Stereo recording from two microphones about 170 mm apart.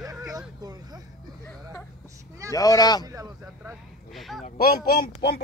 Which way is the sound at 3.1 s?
20° right (ahead or behind).